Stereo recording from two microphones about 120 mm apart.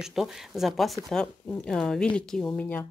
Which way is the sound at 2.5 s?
15° left (ahead or behind).